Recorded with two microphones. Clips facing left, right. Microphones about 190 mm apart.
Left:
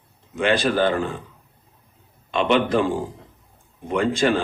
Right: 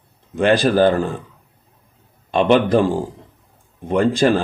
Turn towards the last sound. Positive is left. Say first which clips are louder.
# right 4 dB
turn(degrees=-35)  # may be behind; listen again after turning